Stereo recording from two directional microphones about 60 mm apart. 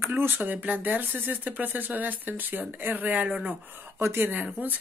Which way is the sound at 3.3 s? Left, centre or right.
Centre.